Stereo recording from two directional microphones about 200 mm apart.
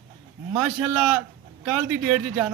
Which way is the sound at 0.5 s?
5° right (ahead or behind).